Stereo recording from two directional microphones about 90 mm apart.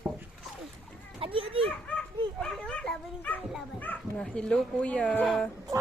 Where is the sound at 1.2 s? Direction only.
90° right.